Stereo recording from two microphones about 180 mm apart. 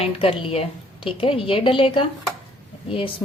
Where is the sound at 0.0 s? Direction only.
30° left (ahead or behind).